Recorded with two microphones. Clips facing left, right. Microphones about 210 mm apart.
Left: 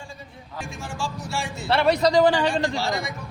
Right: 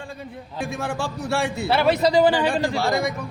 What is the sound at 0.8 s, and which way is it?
Speech, 60° right (ahead or behind).